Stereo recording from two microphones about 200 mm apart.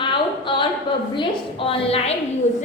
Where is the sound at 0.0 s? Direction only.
25° left (ahead or behind).